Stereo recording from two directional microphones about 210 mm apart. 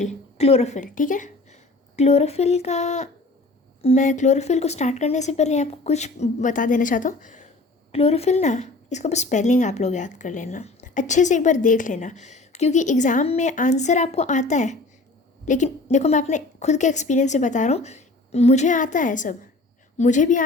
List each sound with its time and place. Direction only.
0.0 s speech: 30° left (ahead or behind)